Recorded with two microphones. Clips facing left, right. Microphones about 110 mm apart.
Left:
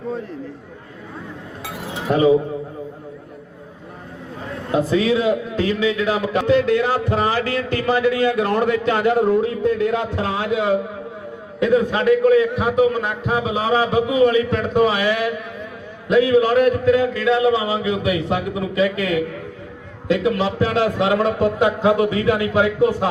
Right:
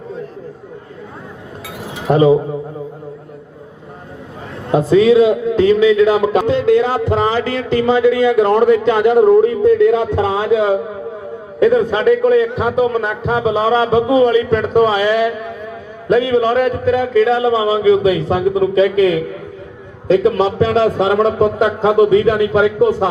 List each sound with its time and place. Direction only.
2.0 s a man's voice: 30° right (ahead or behind)
4.7 s a man's voice: 30° right (ahead or behind)